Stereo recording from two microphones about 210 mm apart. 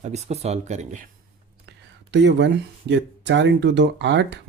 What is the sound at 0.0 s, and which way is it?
Speech, 30° right (ahead or behind).